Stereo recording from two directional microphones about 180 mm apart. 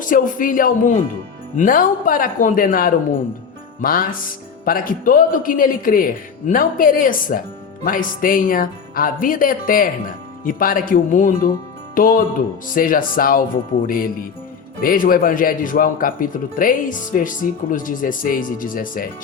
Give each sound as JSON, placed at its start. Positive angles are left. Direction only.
{"t": 0.0, "sound": "speech", "side_deg": 50}